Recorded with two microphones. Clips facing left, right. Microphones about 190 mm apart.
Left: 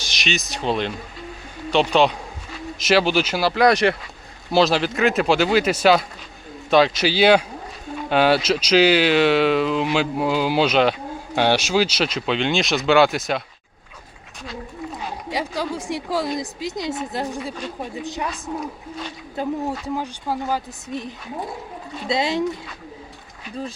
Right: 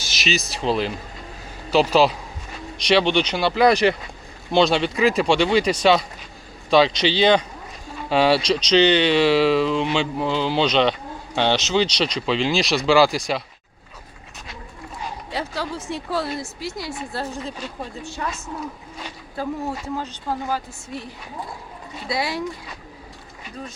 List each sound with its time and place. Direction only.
0.0 s speech: 5° right (ahead or behind)
15.3 s a woman's voice: 15° left (ahead or behind)
19.4 s a woman's voice: 20° left (ahead or behind)
20.0 s speech: 10° left (ahead or behind)
22.1 s a woman's voice: 20° left (ahead or behind)